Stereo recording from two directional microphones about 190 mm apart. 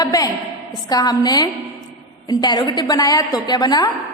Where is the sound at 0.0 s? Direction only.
20° left (ahead or behind).